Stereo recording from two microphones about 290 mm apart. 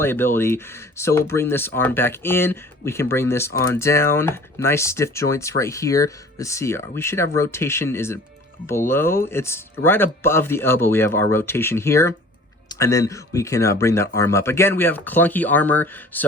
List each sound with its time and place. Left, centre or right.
0.0 s speech: centre